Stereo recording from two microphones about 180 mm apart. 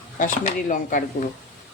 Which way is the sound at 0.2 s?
45° left (ahead or behind).